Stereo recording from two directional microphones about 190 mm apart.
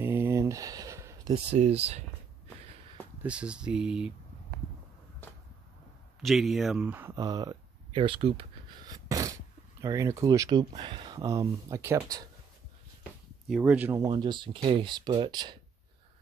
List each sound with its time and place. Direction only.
0.0 s a sound: 10° right (ahead or behind)
1.5 s speech: 35° right (ahead or behind)
3.2 s speech: 5° right (ahead or behind)
6.2 s speech: centre (ahead or behind); by 12.3 s 15° right (ahead or behind)
13.5 s speech: 5° right (ahead or behind)
14.1 s speech: 25° right (ahead or behind)